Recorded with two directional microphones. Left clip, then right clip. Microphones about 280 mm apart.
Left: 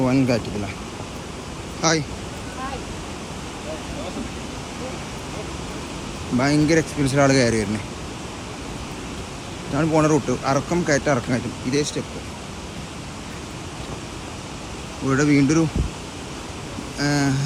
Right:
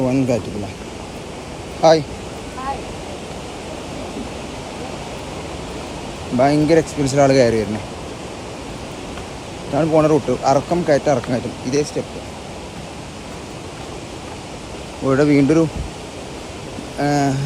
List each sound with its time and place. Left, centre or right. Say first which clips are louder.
0.0 s speech: right 2 dB; centre
1.8 s speech: right 9 dB; centre
6.4 s speech: right 5 dB; centre
9.7 s speech: right 4 dB; centre
15.1 s speech: right 4 dB; centre
17.0 s speech: right 4 dB; centre